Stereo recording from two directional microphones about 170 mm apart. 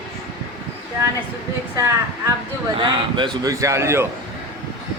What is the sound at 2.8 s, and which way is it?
A man's voice, 30° right (ahead or behind).